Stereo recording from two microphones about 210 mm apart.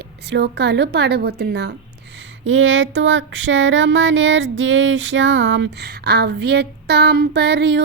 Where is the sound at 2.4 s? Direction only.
65° right (ahead or behind).